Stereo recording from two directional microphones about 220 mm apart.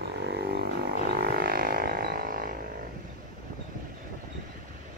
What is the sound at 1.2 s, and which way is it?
Didgeridoo, 45° right (ahead or behind).